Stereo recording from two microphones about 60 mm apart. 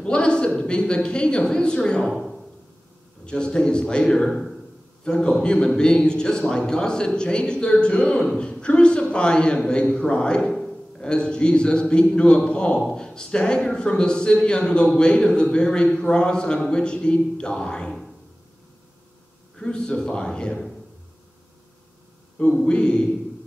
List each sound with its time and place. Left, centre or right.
0.0 s a woman's voice: centre
2.0 s speech: centre
3.3 s a woman's voice: centre
4.3 s a sound: centre
5.0 s a woman's voice: centre
19.5 s a woman's voice: centre
22.7 s a woman's voice: centre